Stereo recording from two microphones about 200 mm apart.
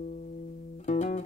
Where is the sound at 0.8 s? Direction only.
35° left (ahead or behind).